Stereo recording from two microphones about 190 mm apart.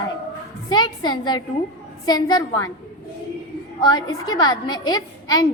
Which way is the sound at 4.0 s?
90° left.